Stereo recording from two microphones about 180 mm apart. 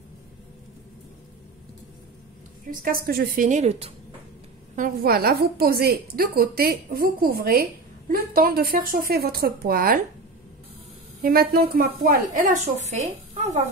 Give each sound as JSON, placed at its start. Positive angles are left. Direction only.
{"t": 2.7, "sound": "a woman's voice", "side_deg": -55}
{"t": 4.7, "sound": "a woman's voice", "side_deg": -55}
{"t": 11.2, "sound": "a woman's voice", "side_deg": -60}